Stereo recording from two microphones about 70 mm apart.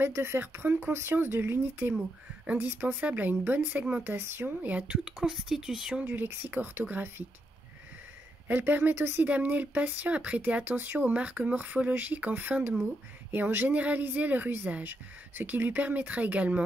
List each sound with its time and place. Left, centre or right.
0.0 s speech: right
5.2 s speech: centre
6.0 s speech: right
8.5 s speech: right
9.2 s speech: right